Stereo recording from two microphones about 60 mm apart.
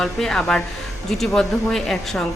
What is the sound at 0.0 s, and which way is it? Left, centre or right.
Speech, centre.